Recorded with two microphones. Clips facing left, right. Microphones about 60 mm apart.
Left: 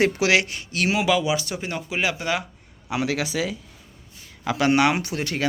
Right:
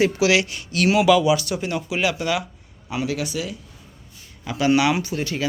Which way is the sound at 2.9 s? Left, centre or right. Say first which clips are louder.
Left 1 dB; left.